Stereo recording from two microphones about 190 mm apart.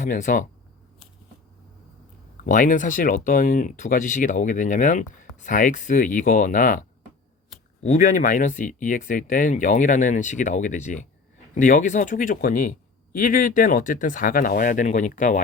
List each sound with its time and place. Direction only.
0.0 s speech: 40° left (ahead or behind)
2.4 s speech: 45° left (ahead or behind)